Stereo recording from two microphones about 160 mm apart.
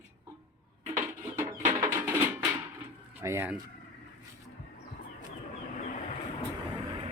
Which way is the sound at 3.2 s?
15° right (ahead or behind).